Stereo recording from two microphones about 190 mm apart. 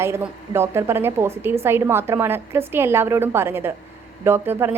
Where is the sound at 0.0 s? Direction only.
15° right (ahead or behind).